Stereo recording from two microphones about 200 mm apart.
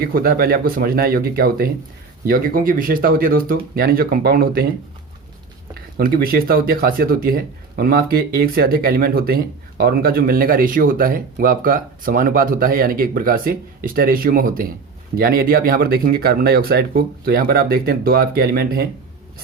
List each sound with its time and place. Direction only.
0.0 s speech: 50° right (ahead or behind)
6.0 s speech: 50° right (ahead or behind)